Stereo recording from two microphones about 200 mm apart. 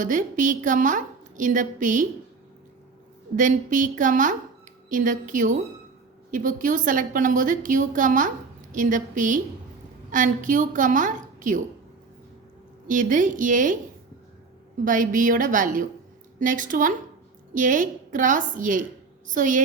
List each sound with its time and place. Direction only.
0.0 s a woman's voice: 40° right (ahead or behind)
3.3 s a woman's voice: 40° right (ahead or behind)
12.9 s a woman's voice: 40° right (ahead or behind)
14.8 s a woman's voice: 40° right (ahead or behind)